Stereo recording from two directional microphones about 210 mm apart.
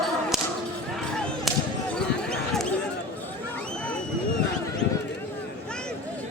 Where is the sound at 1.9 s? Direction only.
5° left (ahead or behind).